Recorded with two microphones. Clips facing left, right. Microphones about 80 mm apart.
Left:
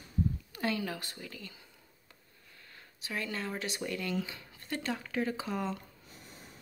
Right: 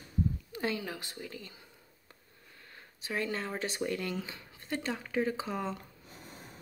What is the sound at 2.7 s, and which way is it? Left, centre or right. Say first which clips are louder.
Speech: right 3 dB; right.